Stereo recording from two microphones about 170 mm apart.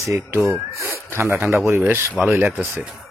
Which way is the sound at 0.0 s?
15° right (ahead or behind).